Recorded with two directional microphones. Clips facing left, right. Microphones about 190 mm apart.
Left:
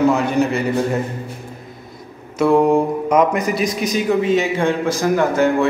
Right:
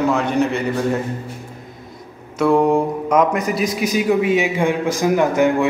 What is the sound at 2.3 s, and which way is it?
Speech, centre (ahead or behind).